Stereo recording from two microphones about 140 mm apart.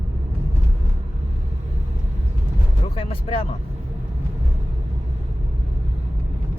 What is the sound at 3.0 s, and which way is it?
Speech, 40° left (ahead or behind).